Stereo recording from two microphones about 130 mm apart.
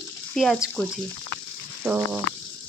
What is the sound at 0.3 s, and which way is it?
Speech, centre (ahead or behind).